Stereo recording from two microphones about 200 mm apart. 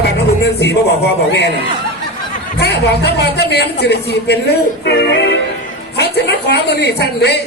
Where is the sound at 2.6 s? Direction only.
55° left (ahead or behind).